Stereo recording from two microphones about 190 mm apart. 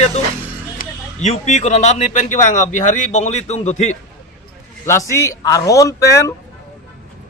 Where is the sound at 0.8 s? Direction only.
35° left (ahead or behind).